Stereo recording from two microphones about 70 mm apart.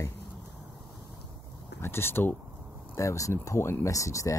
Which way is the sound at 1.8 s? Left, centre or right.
Left.